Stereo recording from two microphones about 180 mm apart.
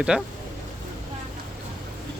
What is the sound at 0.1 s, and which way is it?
Speech, 5° right (ahead or behind).